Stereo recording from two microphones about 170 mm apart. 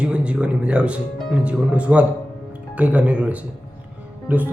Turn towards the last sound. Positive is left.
turn(degrees=-10)  # may be behind; listen again after turning